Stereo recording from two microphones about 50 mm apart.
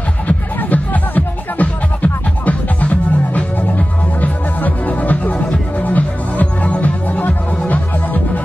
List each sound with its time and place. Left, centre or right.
0.3 s music: left